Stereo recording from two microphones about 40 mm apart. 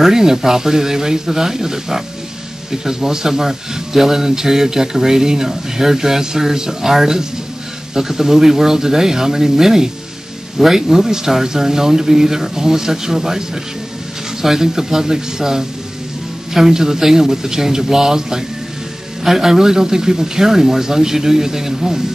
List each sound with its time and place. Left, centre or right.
0.0 s speech: centre
14.4 s speech: centre